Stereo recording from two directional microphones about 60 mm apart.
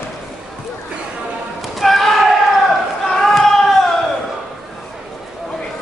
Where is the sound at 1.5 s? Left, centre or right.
Centre.